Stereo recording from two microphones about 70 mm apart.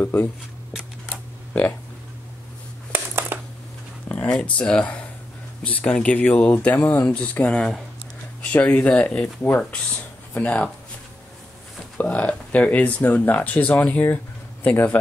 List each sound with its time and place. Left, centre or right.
0.0 s speech: left
2.9 s a sound: right
4.1 s speech: centre
12.0 s speech: centre